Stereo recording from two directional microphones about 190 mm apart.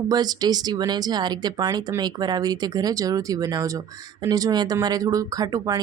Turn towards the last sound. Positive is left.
turn(degrees=-20)  # may be behind; listen again after turning